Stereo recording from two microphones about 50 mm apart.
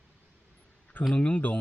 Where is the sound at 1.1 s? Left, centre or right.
Left.